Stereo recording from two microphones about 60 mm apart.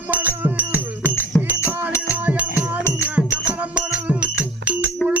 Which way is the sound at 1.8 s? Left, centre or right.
Right.